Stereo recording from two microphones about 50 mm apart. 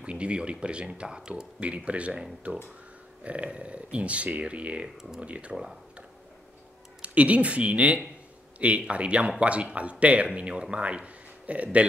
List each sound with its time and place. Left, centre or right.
0.0 s speech: right
7.0 s speech: right